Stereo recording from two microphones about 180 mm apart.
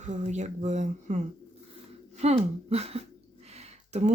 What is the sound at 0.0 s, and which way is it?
Speech, 40° right (ahead or behind).